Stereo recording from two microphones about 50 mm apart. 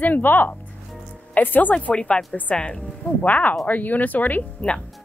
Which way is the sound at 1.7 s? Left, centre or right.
Left.